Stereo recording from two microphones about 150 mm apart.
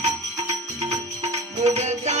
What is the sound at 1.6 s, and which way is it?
Music, 50° right (ahead or behind).